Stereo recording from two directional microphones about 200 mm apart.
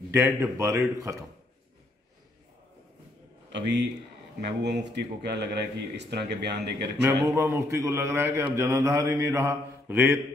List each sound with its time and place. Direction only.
0.1 s mantra: 15° right (ahead or behind)
3.5 s speech: 60° right (ahead or behind)
7.0 s mantra: 15° right (ahead or behind)